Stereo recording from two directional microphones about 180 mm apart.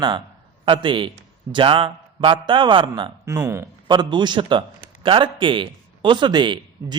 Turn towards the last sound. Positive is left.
turn(degrees=-25)  # may be behind; listen again after turning